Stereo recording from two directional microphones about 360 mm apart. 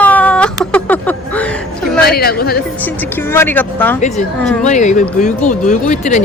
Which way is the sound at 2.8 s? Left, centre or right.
Centre.